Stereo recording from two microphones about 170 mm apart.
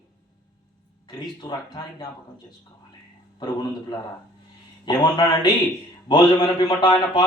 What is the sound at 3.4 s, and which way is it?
A man's voice, 25° left (ahead or behind).